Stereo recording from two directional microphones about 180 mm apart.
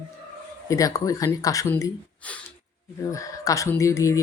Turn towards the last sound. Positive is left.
turn(degrees=15)  # may be behind; listen again after turning